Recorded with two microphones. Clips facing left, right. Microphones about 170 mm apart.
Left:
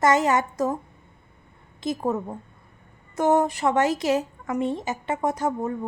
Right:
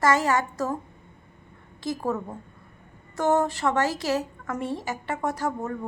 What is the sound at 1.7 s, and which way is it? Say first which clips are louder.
A woman's voice: left 2 dB; 20° left (ahead or behind).